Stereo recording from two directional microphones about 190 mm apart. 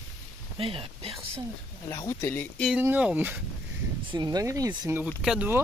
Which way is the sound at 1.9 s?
15° left (ahead or behind).